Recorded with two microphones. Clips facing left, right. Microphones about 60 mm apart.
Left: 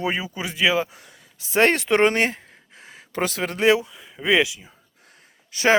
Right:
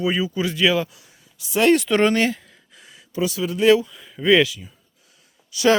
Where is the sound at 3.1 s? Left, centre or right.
Left.